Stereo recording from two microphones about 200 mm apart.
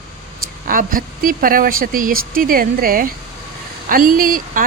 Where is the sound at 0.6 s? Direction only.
45° right (ahead or behind).